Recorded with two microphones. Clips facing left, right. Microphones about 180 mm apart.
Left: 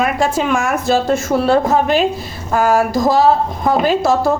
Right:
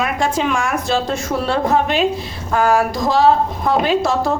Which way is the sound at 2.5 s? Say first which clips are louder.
Left 2 dB; 5° left (ahead or behind).